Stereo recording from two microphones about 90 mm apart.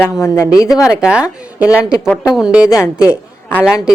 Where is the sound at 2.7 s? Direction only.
35° left (ahead or behind).